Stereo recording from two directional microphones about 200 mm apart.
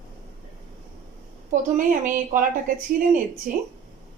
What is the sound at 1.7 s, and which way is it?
Speech, 40° right (ahead or behind).